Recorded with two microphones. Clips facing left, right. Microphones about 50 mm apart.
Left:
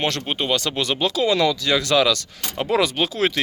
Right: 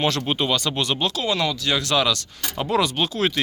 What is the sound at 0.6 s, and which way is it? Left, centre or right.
Speech, left.